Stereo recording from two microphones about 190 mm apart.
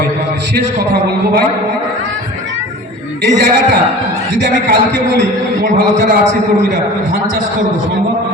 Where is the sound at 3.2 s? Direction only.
65° right (ahead or behind).